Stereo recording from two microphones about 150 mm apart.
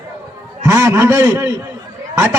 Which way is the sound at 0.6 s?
20° right (ahead or behind).